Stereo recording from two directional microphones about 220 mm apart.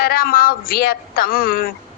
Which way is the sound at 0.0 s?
40° left (ahead or behind).